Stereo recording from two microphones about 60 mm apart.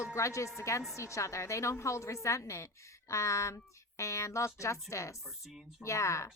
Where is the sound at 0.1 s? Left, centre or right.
Left.